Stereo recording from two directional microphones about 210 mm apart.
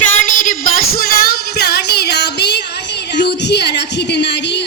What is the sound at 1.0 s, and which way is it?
Music, 50° left (ahead or behind).